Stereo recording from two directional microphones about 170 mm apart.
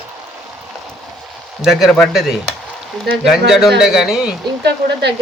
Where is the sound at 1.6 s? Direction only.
Centre (ahead or behind).